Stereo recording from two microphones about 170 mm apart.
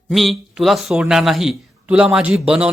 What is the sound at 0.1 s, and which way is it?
Speech, centre (ahead or behind).